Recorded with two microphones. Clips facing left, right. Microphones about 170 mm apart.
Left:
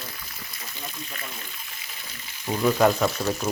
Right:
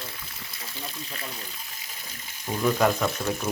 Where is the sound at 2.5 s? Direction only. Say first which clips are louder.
Left 3 dB; centre (ahead or behind).